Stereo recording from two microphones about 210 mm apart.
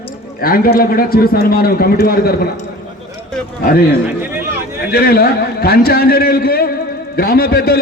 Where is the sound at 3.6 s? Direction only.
45° left (ahead or behind).